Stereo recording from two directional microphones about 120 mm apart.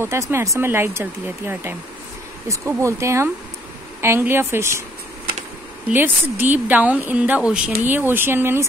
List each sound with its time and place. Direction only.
0.0 s speech: 20° right (ahead or behind)
5.9 s speech: 15° right (ahead or behind)